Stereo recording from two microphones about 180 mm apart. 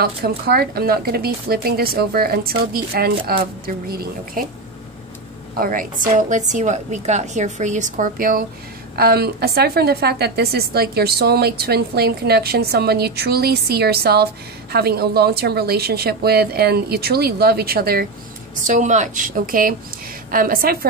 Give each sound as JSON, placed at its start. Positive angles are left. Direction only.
{"t": 0.0, "sound": "a woman's voice", "side_deg": -60}
{"t": 5.6, "sound": "a woman's voice", "side_deg": -50}
{"t": 18.7, "sound": "speech", "side_deg": -45}